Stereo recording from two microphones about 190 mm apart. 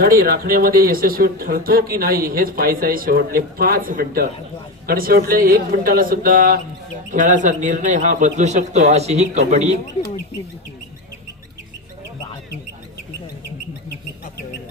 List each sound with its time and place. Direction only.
0.0 s speech: 50° right (ahead or behind)